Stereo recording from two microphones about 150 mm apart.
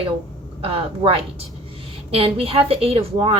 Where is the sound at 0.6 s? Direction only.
40° right (ahead or behind).